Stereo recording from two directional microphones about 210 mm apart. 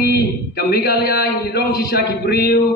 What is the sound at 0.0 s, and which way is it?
Speech, 50° left (ahead or behind).